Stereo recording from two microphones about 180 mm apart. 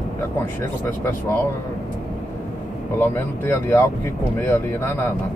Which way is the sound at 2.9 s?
10° left (ahead or behind).